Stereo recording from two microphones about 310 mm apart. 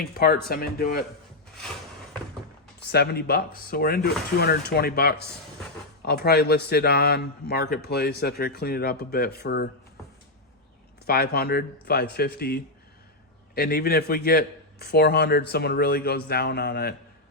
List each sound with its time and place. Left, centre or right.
0.0 s speech: left
2.9 s a man's voice: left
11.0 s a man's voice: left
13.6 s a man's voice: left